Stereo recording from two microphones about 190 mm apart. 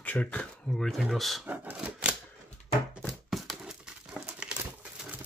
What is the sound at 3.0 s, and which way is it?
Crumpling, centre (ahead or behind).